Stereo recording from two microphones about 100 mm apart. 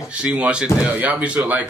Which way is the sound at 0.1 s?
15° right (ahead or behind).